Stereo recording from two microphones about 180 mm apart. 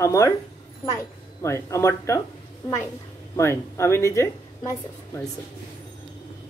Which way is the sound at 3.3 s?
15° left (ahead or behind).